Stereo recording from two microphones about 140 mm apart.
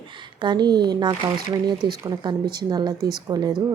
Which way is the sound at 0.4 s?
30° right (ahead or behind).